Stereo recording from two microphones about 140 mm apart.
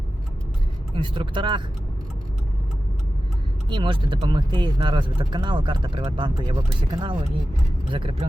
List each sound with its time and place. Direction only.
0.9 s speech: 35° right (ahead or behind)
3.7 s speech: 35° right (ahead or behind)